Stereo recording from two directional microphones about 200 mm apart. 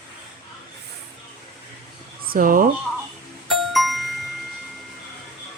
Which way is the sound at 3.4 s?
Centre (ahead or behind).